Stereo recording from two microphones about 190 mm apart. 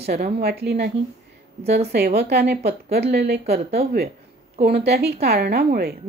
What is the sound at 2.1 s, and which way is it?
Speech, 60° right (ahead or behind).